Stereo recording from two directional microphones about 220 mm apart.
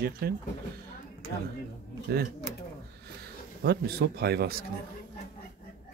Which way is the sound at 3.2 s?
45° right (ahead or behind).